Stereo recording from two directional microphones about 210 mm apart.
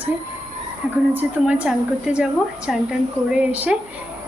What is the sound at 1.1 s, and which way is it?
A woman's voice, 5° right (ahead or behind).